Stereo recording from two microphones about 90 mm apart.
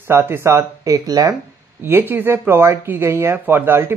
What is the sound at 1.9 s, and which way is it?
Speech, 25° right (ahead or behind).